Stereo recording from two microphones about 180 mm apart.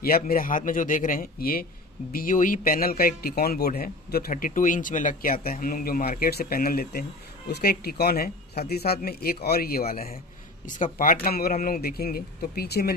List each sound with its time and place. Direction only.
0.0 s a man's voice: 55° left (ahead or behind)
10.7 s speech: 45° left (ahead or behind); by 12.9 s 60° left (ahead or behind)